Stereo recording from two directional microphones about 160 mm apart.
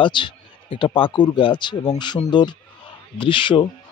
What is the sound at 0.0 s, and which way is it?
A man's voice, 30° left (ahead or behind).